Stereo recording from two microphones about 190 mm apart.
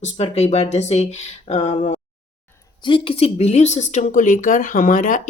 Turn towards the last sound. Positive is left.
turn(degrees=45)  # may be behind; listen again after turning